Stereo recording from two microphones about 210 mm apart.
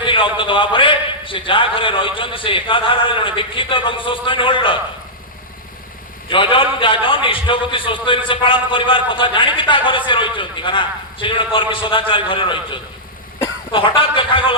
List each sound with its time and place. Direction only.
0.0 s a man's voice: 25° left (ahead or behind)
6.2 s a man's voice: 25° left (ahead or behind)